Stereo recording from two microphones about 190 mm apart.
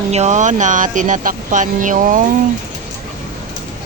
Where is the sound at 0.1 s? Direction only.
35° right (ahead or behind).